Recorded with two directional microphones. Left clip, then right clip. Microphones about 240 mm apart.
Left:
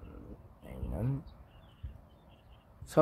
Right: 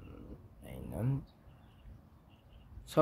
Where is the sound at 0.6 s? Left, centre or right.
Centre.